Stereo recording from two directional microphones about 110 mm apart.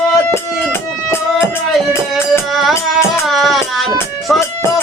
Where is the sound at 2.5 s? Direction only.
Centre (ahead or behind).